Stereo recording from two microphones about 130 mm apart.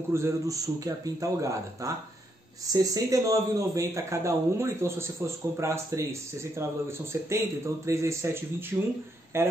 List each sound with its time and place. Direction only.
0.1 s a man's voice: 25° right (ahead or behind)